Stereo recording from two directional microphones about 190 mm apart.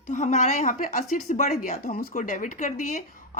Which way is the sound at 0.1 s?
40° left (ahead or behind).